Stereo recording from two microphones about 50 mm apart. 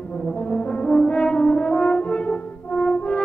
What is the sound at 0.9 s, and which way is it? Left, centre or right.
French horn, centre.